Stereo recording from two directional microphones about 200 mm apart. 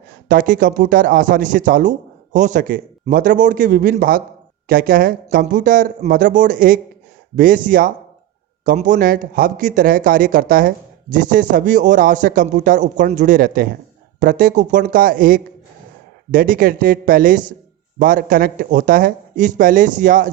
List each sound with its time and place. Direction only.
0.3 s speech: 45° right (ahead or behind)